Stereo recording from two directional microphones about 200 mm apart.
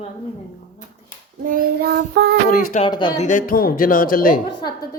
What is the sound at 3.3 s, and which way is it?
A woman's voice, 45° left (ahead or behind).